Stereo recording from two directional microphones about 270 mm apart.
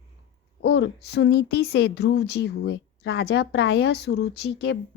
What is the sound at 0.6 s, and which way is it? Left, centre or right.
Speech, left.